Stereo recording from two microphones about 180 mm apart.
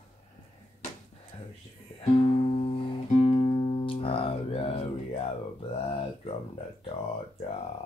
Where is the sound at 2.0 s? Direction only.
30° left (ahead or behind).